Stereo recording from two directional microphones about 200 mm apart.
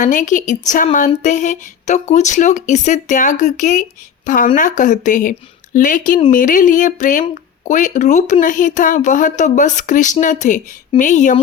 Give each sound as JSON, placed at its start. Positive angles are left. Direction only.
{"t": 0.0, "sound": "speech", "side_deg": 40}